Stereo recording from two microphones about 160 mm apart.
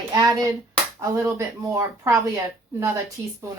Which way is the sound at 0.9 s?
20° right (ahead or behind).